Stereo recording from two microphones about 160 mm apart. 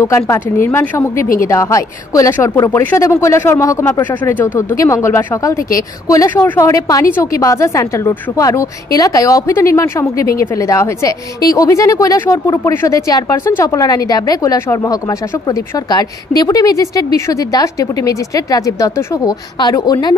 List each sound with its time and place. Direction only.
0.0 s a woman's voice: 20° left (ahead or behind)